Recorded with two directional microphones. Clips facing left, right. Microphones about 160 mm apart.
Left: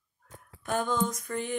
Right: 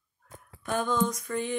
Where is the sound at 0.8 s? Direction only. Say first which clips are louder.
Right 2 dB; 45° left (ahead or behind).